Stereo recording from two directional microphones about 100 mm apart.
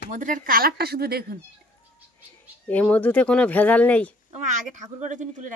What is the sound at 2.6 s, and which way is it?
Speech, 15° left (ahead or behind).